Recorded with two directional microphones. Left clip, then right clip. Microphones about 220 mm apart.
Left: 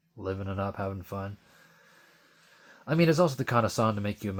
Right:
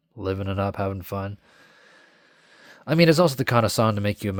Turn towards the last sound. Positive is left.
turn(degrees=-35)  # may be behind; listen again after turning